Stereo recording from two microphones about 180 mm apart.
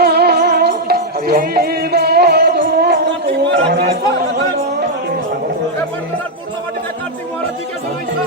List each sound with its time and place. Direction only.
0.0 s music: 60° right (ahead or behind)
3.5 s speech: 65° right (ahead or behind)